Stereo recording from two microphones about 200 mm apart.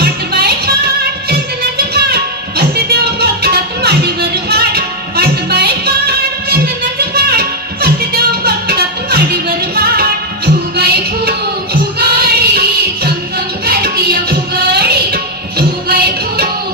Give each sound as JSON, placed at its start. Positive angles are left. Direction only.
{"t": 0.0, "sound": "music", "side_deg": -55}